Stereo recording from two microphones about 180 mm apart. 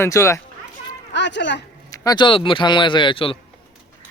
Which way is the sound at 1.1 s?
80° left.